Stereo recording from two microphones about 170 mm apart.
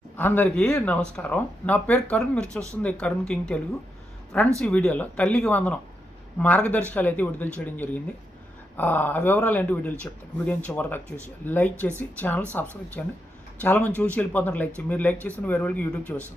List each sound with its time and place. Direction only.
0.2 s speech: 10° left (ahead or behind)
4.6 s speech: 5° left (ahead or behind)